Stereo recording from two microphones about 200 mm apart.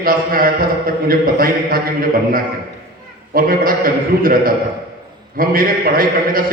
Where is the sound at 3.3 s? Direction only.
45° right (ahead or behind).